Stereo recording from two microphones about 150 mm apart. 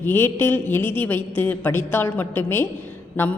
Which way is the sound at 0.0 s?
15° left (ahead or behind).